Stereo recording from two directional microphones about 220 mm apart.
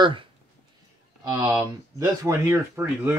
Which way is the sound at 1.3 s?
15° right (ahead or behind).